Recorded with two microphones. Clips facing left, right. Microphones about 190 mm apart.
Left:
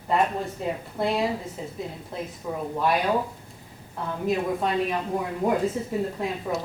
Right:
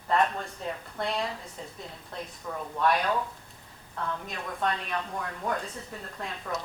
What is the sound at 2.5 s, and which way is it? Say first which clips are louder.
Speech: left 5 dB; 15° left (ahead or behind).